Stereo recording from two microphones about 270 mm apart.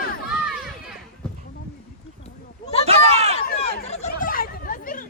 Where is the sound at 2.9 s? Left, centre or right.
Right.